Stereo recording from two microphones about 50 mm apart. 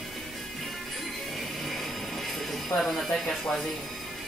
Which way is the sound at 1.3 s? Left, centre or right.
Centre.